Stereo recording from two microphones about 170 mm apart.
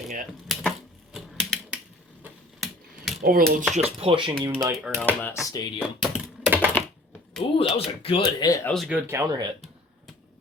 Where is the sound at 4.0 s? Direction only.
30° right (ahead or behind).